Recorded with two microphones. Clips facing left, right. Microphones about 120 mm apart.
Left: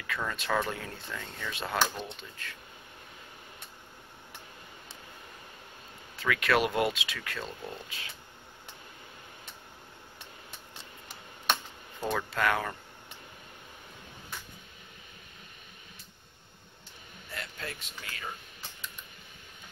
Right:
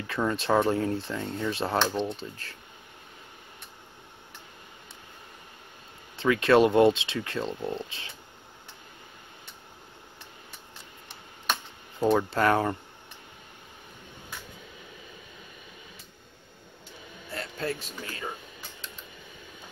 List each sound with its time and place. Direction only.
0.0 s speech: 30° right (ahead or behind)
6.1 s speech: 30° right (ahead or behind)
12.0 s speech: 25° right (ahead or behind)
17.3 s speech: 35° right (ahead or behind)